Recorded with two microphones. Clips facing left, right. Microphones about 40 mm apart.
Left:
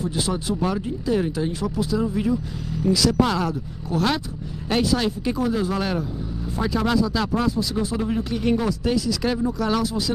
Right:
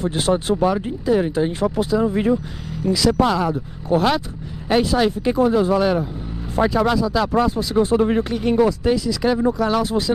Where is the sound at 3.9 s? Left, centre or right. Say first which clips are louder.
Right 6 dB; right.